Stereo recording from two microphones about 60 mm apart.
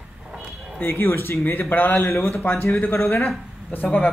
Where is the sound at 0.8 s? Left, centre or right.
Left.